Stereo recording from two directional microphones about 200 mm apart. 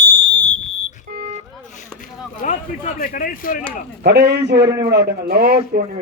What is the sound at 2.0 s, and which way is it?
Speech, 40° left (ahead or behind).